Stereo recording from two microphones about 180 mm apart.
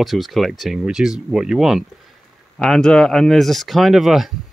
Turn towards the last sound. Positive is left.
turn(degrees=0)  # may be behind; listen again after turning